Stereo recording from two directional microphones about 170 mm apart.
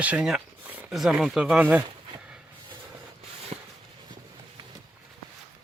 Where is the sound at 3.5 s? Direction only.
40° right (ahead or behind).